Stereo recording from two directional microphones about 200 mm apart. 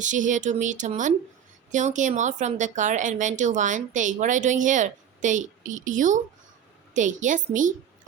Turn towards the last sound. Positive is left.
turn(degrees=-40)  # may be behind; listen again after turning